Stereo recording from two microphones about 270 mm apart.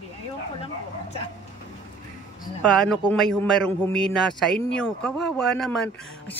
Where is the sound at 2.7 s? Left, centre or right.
Centre.